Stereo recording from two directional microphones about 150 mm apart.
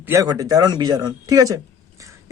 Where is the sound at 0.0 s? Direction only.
20° right (ahead or behind).